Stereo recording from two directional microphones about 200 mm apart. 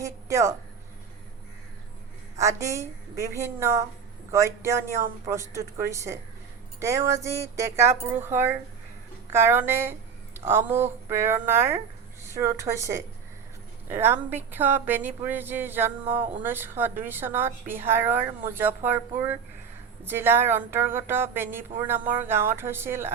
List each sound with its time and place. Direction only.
0.0 s speech: 15° right (ahead or behind)
2.4 s a woman's voice: 15° right (ahead or behind)